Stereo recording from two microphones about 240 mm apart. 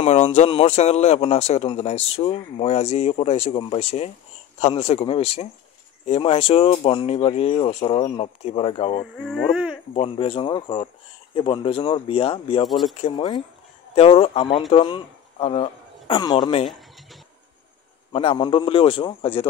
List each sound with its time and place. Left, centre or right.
0.0 s a man's voice: left
9.1 s speech: centre
9.9 s a man's voice: left
18.1 s a man's voice: left